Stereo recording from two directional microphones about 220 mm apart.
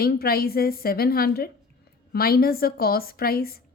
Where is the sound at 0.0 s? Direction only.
45° left (ahead or behind).